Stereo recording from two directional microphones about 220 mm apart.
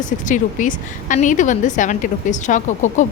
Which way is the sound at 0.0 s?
35° left (ahead or behind).